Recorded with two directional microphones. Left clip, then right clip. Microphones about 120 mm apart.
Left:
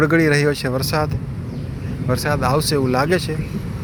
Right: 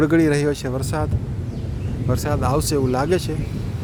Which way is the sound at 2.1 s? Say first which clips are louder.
Left 3 dB; 15° right (ahead or behind).